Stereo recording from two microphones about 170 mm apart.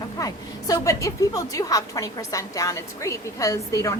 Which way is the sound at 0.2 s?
20° left (ahead or behind).